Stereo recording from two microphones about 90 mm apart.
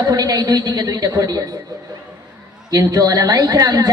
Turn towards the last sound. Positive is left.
turn(degrees=-45)  # may be behind; listen again after turning